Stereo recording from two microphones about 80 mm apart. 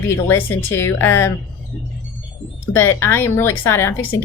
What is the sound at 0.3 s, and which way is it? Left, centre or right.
Speech, left.